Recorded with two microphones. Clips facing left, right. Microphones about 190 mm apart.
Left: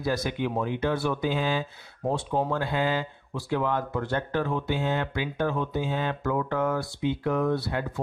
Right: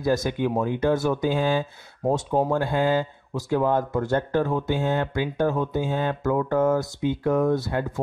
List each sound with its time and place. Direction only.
0.0 s speech: 45° right (ahead or behind)